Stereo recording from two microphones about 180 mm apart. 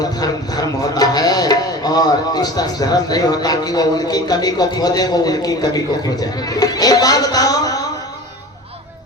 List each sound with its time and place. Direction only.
0.0 s speech: 20° left (ahead or behind)